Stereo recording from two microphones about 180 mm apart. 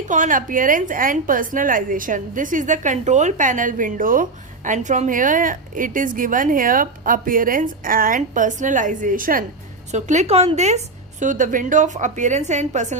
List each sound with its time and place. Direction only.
0.1 s a woman's voice: 45° right (ahead or behind)